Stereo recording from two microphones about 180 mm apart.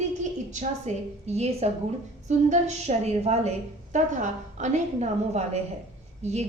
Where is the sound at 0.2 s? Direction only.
40° right (ahead or behind).